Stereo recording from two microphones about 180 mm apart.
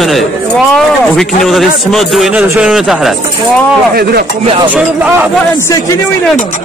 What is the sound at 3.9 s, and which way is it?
Speech, 60° right (ahead or behind).